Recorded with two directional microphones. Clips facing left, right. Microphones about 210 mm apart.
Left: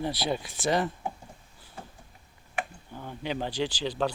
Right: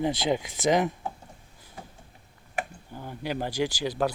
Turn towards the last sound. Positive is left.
turn(degrees=-10)  # may be behind; listen again after turning